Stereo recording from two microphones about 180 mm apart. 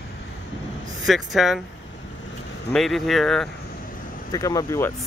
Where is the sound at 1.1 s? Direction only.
Centre (ahead or behind).